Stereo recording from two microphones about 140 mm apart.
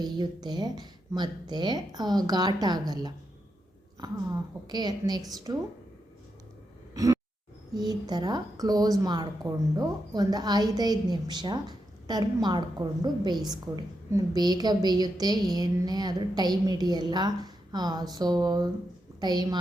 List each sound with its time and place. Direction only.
0.0 s a woman's voice: 30° right (ahead or behind)
4.7 s a woman's voice: 30° right (ahead or behind)
6.9 s a sound: 25° right (ahead or behind)
7.8 s a woman's voice: 30° right (ahead or behind)